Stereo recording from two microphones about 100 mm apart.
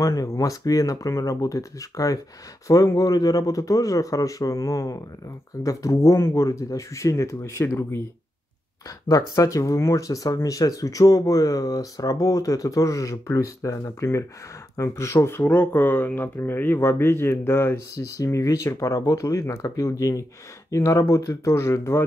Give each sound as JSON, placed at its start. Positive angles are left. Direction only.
{"t": 0.0, "sound": "speech", "side_deg": 35}
{"t": 8.8, "sound": "speech", "side_deg": 35}
{"t": 17.9, "sound": "speech", "side_deg": 35}